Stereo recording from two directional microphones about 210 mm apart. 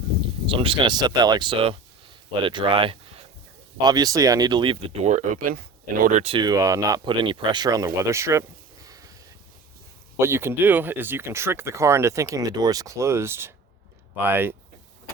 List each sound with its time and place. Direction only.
0.4 s speech: 25° right (ahead or behind)
8.9 s a sound: 15° right (ahead or behind)
10.2 s speech: 10° right (ahead or behind)